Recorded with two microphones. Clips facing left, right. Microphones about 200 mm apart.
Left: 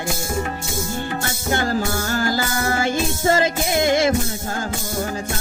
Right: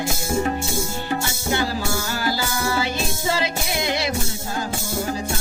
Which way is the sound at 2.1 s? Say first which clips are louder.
Left 5 dB; 50° left (ahead or behind).